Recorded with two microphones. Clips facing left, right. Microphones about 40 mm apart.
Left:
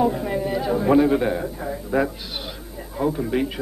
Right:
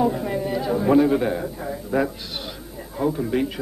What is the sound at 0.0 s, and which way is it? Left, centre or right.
A man's voice, centre.